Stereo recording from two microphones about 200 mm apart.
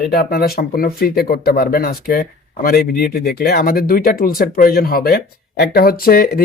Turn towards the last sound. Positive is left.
turn(degrees=50)  # may be behind; listen again after turning